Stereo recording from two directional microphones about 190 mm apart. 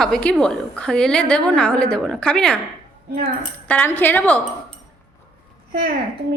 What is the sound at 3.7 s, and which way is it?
Speech, 10° left (ahead or behind).